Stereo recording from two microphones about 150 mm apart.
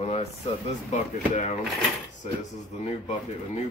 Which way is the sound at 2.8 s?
45° left (ahead or behind).